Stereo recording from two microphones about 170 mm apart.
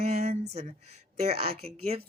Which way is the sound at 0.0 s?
40° right (ahead or behind).